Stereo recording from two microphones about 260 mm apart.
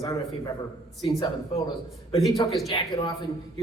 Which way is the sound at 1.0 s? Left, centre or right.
Centre.